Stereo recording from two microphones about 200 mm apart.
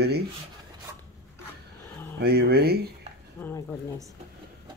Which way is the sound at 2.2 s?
50° right (ahead or behind).